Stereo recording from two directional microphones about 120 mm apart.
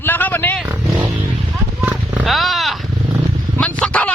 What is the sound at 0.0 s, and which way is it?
Vehicle, 15° left (ahead or behind).